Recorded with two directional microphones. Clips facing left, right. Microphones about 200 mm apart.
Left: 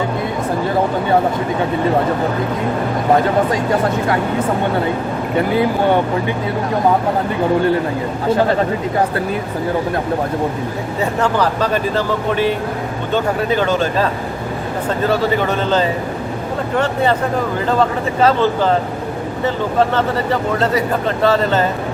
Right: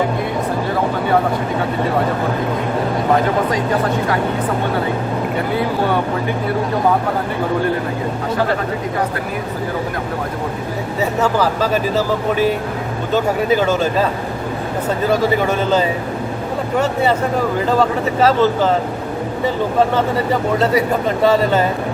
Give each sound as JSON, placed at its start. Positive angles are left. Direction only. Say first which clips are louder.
{"t": 11.0, "sound": "speech", "louder": "even", "side_deg": -5}
{"t": 15.1, "sound": "speech", "louder": "right 2 dB", "side_deg": -10}
{"t": 19.9, "sound": "speech", "louder": "even", "side_deg": -10}